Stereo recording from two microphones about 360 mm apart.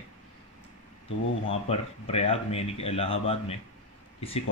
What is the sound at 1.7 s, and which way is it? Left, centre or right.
Speech, centre.